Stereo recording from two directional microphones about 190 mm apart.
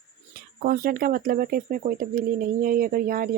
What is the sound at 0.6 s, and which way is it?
Speech, 50° right (ahead or behind).